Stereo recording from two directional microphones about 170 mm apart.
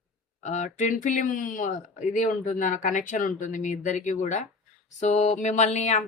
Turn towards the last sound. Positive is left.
turn(degrees=45)  # may be behind; listen again after turning